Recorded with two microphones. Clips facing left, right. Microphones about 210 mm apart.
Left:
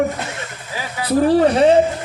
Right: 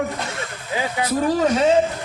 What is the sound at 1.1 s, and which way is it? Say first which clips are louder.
Speech: left 6 dB; 35° left (ahead or behind).